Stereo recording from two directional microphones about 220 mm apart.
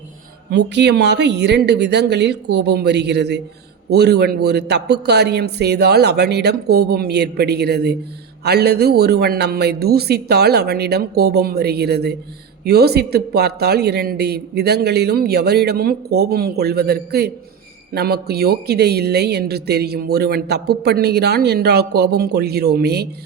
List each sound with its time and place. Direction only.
0.5 s speech: 50° right (ahead or behind)